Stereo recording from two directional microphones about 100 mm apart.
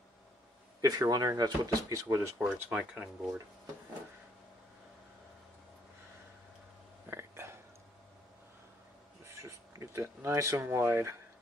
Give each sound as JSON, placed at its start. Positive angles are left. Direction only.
{"t": 0.7, "sound": "speech", "side_deg": -35}
{"t": 2.4, "sound": "speech", "side_deg": -10}
{"t": 7.1, "sound": "whispering", "side_deg": -25}
{"t": 9.2, "sound": "speech", "side_deg": -30}